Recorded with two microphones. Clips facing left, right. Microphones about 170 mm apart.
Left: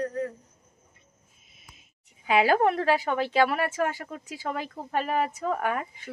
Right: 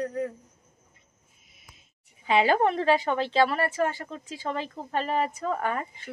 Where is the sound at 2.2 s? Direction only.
5° left (ahead or behind).